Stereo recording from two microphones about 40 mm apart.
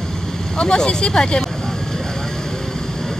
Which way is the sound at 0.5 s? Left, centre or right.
Centre.